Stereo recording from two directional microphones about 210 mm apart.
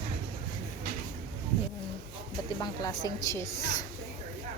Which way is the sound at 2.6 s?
20° left (ahead or behind).